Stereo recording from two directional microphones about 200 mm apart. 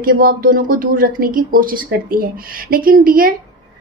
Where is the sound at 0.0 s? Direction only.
45° right (ahead or behind).